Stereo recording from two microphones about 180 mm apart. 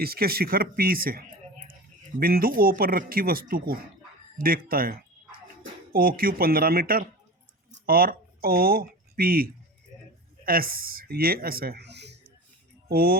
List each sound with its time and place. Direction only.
0.0 s speech: 55° right (ahead or behind)
12.9 s speech: 55° right (ahead or behind)